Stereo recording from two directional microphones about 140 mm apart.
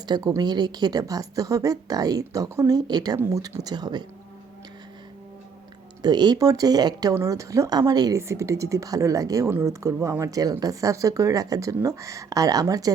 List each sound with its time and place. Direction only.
0.0 s speech: 30° right (ahead or behind)
6.0 s speech: 30° right (ahead or behind)